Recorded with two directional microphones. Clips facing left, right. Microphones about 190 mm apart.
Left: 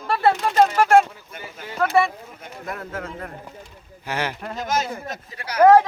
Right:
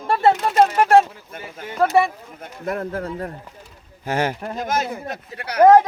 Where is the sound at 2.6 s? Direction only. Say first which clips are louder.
Right 7 dB; 40° right (ahead or behind).